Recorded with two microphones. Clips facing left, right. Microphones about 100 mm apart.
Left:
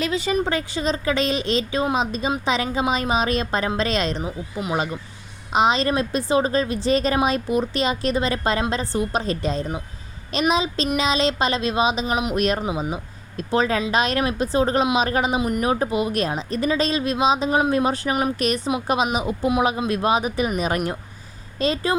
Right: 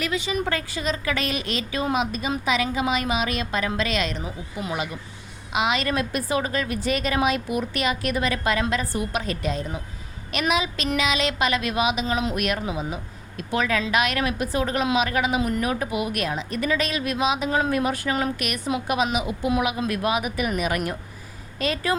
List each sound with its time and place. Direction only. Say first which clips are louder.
0.0 s speech: left 4 dB; 30° left (ahead or behind)
4.2 s speech: left 4 dB; 20° left (ahead or behind)
12.0 s speech: left 3 dB; 20° left (ahead or behind)
12.6 s speech: left 3 dB; 20° left (ahead or behind)
13.3 s speech: left 3 dB; 35° left (ahead or behind)
15.4 s speech: left 1 dB; 20° left (ahead or behind)
15.6 s speech: left 4 dB; 30° left (ahead or behind)